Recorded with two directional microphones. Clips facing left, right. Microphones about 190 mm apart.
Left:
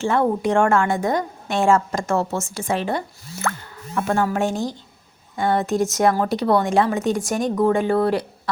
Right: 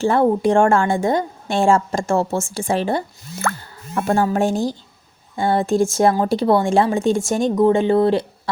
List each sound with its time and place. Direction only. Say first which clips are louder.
0.0 s a woman's voice: right 4 dB; 35° right (ahead or behind)